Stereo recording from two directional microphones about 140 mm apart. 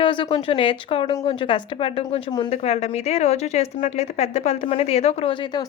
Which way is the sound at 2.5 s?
50° left (ahead or behind).